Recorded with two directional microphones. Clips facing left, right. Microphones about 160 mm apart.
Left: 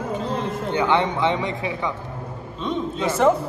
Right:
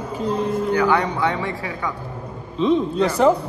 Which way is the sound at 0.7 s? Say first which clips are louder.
Even; 25° left (ahead or behind).